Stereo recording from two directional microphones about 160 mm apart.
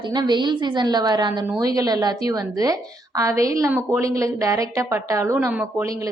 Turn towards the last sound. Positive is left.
turn(degrees=-20)  # may be behind; listen again after turning